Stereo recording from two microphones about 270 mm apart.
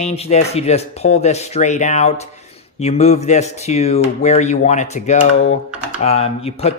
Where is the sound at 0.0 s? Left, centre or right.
Left.